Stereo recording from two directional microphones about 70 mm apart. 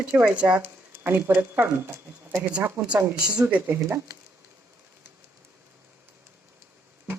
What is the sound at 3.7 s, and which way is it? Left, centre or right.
Speech, right.